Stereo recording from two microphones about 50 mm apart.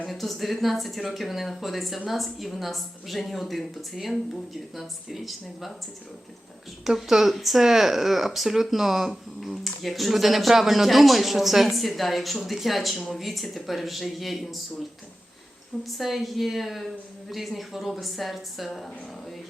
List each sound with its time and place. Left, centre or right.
0.1 s speech: centre
6.8 s speech: centre
15.8 s speech: centre